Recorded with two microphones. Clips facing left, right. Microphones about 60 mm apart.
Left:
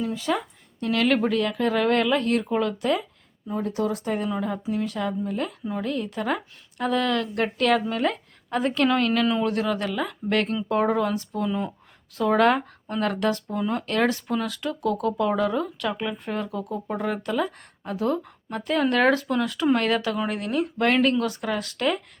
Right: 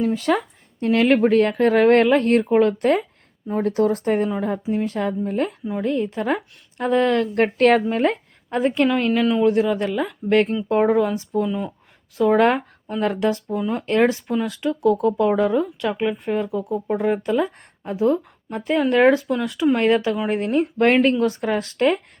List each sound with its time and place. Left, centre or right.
0.0 s speech: right
0.8 s speech: right
4.3 s speech: right
11.4 s speech: centre
12.4 s speech: right
13.6 s speech: centre
13.8 s speech: right
19.7 s speech: right